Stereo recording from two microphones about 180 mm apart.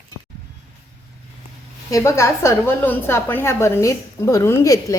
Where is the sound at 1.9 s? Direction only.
15° left (ahead or behind).